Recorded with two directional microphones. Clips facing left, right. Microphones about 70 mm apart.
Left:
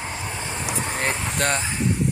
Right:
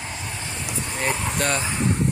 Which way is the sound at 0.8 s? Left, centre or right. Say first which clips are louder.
Right 1 dB; left.